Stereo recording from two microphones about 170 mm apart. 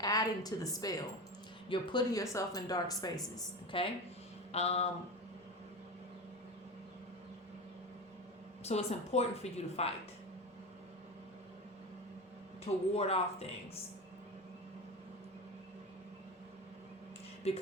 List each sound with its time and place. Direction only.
0.0 s a woman's voice: 20° left (ahead or behind); by 4.9 s 40° left (ahead or behind)
8.6 s a woman's voice: 40° left (ahead or behind)
12.6 s a woman's voice: 35° left (ahead or behind)